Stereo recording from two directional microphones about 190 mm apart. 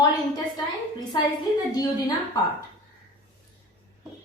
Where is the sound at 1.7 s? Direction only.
20° left (ahead or behind).